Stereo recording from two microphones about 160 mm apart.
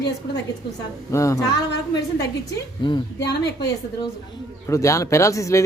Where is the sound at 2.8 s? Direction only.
30° left (ahead or behind).